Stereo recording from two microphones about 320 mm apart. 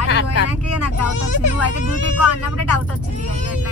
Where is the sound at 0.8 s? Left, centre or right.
Left.